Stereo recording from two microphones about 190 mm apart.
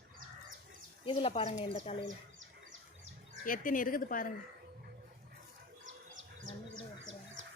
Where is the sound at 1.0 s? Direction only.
25° left (ahead or behind).